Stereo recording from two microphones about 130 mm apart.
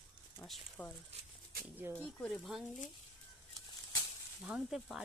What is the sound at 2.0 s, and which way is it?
Speech, centre (ahead or behind).